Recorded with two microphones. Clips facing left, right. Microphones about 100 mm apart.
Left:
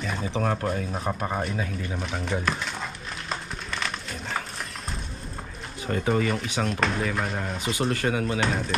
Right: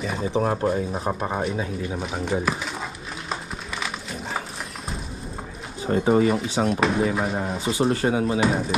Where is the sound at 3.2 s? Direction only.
5° right (ahead or behind).